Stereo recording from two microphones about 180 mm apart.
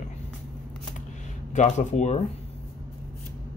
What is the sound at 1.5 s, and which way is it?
Speech, 40° left (ahead or behind).